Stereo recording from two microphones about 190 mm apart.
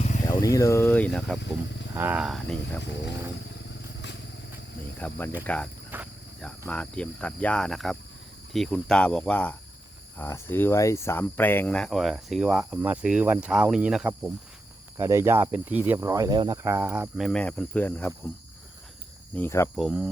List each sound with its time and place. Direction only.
0.0 s a sound: 40° left (ahead or behind)
0.3 s speech: 20° left (ahead or behind)
1.9 s speech: 10° right (ahead or behind)
2.8 s speech: 65° left (ahead or behind)
4.9 s speech: 10° left (ahead or behind)
5.9 s cricket: 10° right (ahead or behind)
6.7 s speech: 5° left (ahead or behind)
19.4 s speech: 10° left (ahead or behind)
19.7 s speech: 5° right (ahead or behind)